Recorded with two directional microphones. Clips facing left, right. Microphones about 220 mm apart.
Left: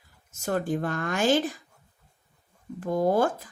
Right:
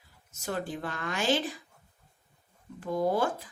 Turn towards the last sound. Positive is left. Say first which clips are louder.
# left 4 dB
turn(degrees=45)  # may be behind; listen again after turning